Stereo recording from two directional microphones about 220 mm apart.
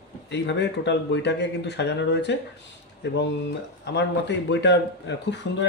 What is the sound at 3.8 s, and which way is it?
Speech, 50° left (ahead or behind).